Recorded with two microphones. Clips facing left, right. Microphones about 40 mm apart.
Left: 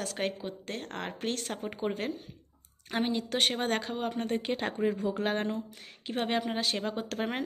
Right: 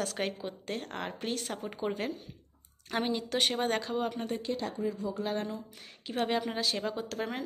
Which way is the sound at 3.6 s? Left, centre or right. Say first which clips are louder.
Right 1 dB; left.